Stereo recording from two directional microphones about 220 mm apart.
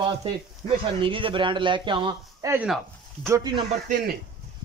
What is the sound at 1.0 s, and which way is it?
Speech, 25° right (ahead or behind).